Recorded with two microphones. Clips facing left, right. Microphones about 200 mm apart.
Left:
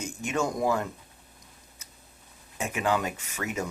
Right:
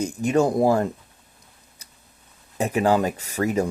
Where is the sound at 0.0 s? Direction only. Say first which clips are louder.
Right 9 dB; 35° right (ahead or behind).